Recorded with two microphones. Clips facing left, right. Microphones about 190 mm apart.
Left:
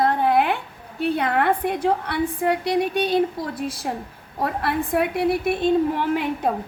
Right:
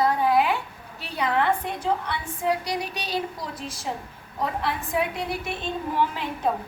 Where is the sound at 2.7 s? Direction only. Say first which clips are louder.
Left 9 dB; 55° left (ahead or behind).